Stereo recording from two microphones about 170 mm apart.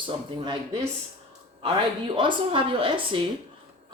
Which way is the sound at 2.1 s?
30° right (ahead or behind).